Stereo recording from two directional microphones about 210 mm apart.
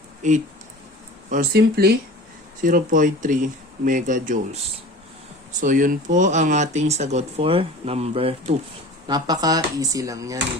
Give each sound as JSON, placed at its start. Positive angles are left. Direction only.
{"t": 0.2, "sound": "speech", "side_deg": -35}
{"t": 1.3, "sound": "speech", "side_deg": -45}